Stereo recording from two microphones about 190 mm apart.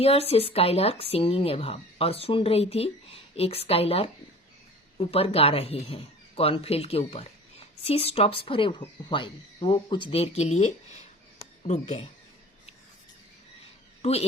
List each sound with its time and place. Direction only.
0.0 s speech: 30° left (ahead or behind)
11.3 s a sound: 30° left (ahead or behind)
14.0 s a man's voice: 35° left (ahead or behind)